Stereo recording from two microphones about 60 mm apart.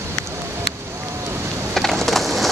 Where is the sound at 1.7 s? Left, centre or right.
Centre.